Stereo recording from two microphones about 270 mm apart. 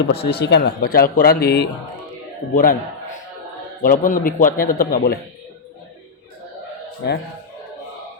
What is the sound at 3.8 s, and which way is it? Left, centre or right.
A man's voice, left.